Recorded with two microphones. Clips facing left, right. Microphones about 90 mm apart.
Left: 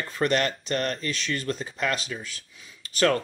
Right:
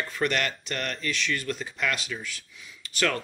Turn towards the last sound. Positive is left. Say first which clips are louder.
# left 5 dB
turn(degrees=35)  # may be behind; listen again after turning